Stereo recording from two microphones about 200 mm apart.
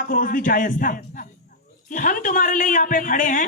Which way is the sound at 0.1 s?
45° left (ahead or behind).